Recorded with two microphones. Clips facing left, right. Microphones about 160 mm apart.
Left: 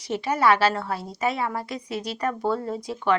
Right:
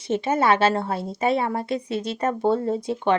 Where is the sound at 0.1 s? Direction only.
25° right (ahead or behind).